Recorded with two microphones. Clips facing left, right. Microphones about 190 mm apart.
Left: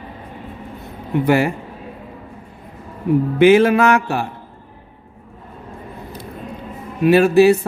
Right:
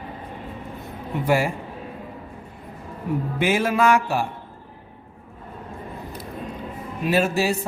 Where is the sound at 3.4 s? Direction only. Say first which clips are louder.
Left 9 dB; 65° left (ahead or behind).